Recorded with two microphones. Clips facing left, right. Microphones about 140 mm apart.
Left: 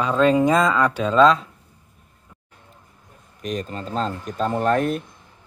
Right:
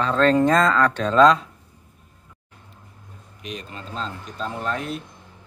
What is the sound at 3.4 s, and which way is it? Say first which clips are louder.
Speech: left 7 dB; 45° left (ahead or behind).